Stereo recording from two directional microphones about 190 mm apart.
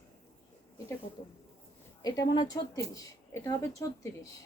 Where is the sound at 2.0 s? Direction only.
20° left (ahead or behind).